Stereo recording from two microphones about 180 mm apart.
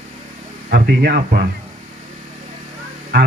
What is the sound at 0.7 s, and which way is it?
Speech, 60° right (ahead or behind).